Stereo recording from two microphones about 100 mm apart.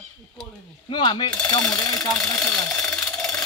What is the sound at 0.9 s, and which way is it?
Coin, 50° left (ahead or behind).